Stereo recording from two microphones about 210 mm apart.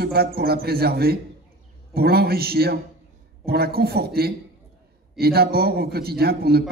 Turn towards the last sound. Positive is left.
turn(degrees=-50)  # may be behind; listen again after turning